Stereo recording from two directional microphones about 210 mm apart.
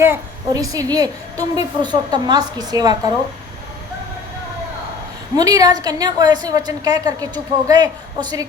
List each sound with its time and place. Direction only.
0.0 s a woman's voice: 15° right (ahead or behind)
5.4 s a woman's voice: 15° right (ahead or behind)